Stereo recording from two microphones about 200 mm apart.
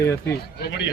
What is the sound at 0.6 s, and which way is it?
Speech, 60° left (ahead or behind).